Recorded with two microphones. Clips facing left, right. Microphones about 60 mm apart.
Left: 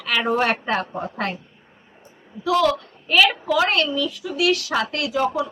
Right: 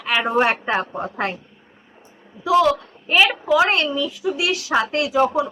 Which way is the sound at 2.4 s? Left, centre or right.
Centre.